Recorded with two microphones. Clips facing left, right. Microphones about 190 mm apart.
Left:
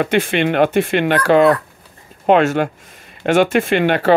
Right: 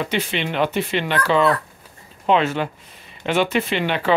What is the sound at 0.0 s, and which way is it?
Speech, 55° left (ahead or behind).